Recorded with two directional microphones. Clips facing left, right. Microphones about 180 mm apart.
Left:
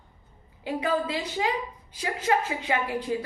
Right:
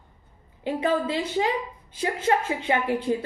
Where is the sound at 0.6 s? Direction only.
25° right (ahead or behind).